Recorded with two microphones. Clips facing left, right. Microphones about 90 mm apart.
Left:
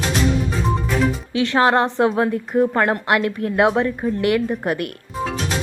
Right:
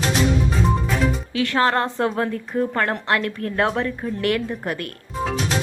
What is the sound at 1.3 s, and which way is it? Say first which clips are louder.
A woman's voice: left 4 dB; 20° left (ahead or behind).